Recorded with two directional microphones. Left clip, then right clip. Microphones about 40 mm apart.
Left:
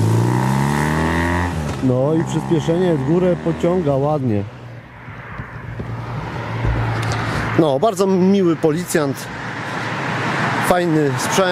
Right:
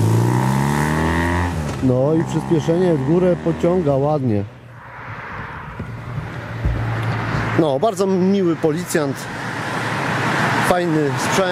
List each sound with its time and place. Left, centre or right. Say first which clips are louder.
0.0 s vehicle: even; centre
2.2 s speech: even; centre
6.7 s vehicle: left 2 dB; left
7.2 s a sound: left 1 dB; centre
7.6 s speech: left 2 dB; centre
9.4 s vehicle: right 3 dB; right
11.1 s speech: left 1 dB; centre